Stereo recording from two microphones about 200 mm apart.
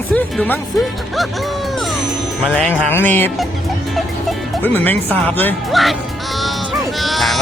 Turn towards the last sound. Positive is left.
turn(degrees=0)  # may be behind; listen again after turning